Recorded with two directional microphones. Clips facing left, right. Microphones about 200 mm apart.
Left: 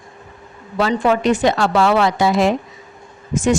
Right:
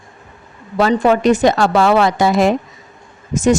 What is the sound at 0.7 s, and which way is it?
Speech, 40° right (ahead or behind).